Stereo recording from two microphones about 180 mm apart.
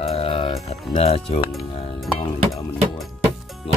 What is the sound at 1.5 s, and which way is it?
Music, centre (ahead or behind).